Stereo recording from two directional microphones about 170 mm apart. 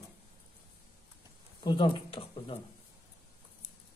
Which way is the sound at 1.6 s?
25° left (ahead or behind).